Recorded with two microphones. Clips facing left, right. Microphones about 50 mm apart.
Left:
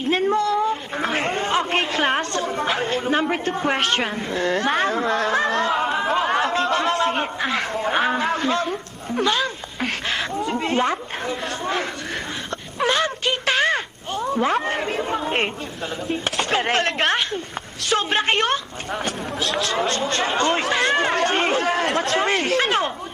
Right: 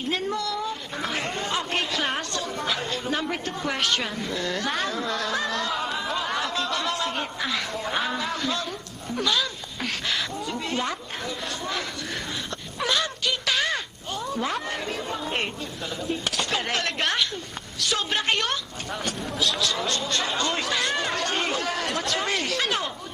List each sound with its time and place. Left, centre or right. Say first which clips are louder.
0.1 s speech: left 9 dB; left
12.8 s a sound: left 5 dB; left
16.0 s speech: left 4 dB; left